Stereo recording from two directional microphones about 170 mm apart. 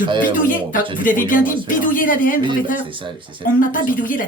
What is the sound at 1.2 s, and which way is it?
A woman's voice, 50° left (ahead or behind).